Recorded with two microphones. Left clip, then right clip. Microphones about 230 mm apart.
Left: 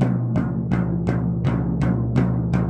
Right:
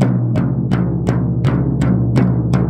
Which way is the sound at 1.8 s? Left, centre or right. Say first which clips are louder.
Right 6 dB; right.